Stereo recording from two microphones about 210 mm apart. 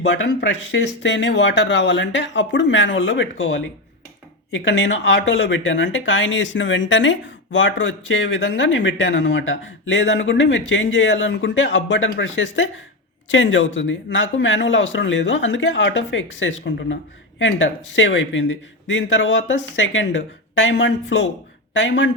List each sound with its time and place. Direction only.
0.0 s speech: 60° left (ahead or behind)